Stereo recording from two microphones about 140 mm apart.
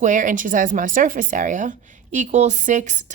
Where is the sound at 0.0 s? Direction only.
70° right (ahead or behind).